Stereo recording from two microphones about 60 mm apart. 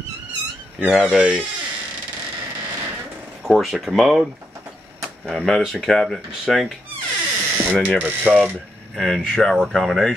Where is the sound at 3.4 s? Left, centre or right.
Centre.